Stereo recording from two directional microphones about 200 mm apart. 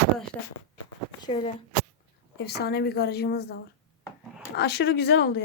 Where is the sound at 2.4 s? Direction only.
55° left (ahead or behind).